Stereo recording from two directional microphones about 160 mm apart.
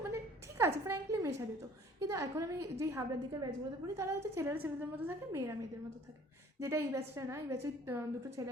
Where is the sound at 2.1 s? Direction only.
20° right (ahead or behind).